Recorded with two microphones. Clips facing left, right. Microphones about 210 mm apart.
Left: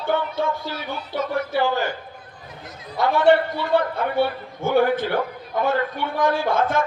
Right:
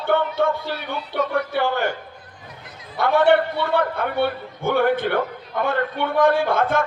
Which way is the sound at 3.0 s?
55° right (ahead or behind).